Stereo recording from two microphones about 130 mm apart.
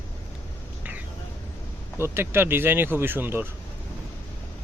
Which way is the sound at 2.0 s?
20° right (ahead or behind).